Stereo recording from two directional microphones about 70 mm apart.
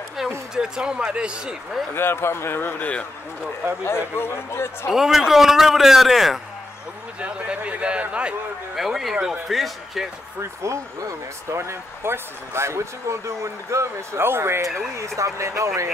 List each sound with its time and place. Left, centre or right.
0.2 s a sound: centre
0.6 s a man's voice: centre
2.0 s speech: left
4.9 s a man's voice: centre
7.2 s a man's voice: centre
8.7 s a man's voice: centre
9.1 s a man's voice: centre
9.5 s a man's voice: centre
10.4 s speech: right
15.0 s speech: right